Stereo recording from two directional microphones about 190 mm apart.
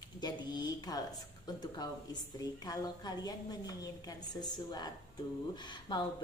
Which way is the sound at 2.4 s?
20° left (ahead or behind).